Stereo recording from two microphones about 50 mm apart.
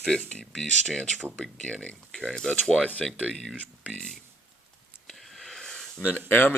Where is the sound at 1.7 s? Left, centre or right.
Left.